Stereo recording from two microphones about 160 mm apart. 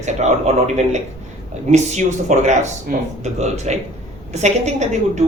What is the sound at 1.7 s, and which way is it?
A woman's voice, 45° right (ahead or behind).